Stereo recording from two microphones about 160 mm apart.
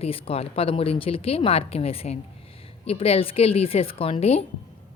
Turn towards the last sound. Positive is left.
turn(degrees=40)  # may be behind; listen again after turning